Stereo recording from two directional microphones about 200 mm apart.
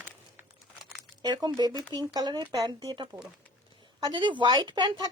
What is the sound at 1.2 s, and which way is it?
Speech, 20° right (ahead or behind).